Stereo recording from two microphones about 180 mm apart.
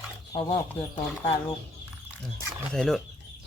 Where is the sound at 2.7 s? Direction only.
Centre (ahead or behind).